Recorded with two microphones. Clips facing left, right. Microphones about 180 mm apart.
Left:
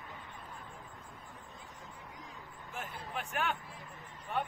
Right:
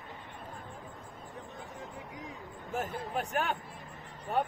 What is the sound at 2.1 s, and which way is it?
Vehicle, 70° right (ahead or behind).